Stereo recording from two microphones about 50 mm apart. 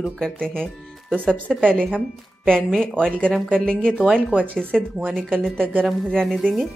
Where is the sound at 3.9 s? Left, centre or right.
Right.